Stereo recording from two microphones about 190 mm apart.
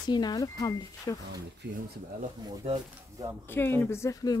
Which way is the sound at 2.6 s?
35° right (ahead or behind).